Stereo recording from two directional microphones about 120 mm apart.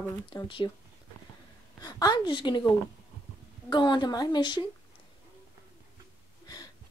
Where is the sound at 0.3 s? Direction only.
40° left (ahead or behind).